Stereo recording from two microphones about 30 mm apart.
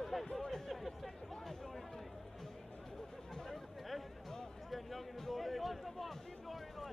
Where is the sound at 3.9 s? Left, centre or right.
Centre.